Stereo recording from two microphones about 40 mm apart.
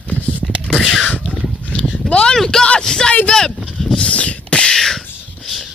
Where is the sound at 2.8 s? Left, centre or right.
Centre.